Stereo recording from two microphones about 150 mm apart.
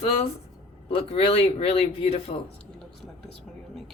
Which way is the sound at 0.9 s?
40° left (ahead or behind).